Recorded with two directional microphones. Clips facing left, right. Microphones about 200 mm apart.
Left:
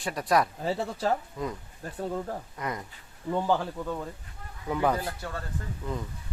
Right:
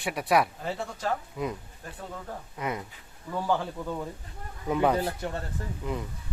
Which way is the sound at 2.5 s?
10° right (ahead or behind).